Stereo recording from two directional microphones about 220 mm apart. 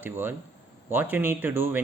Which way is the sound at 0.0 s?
10° right (ahead or behind).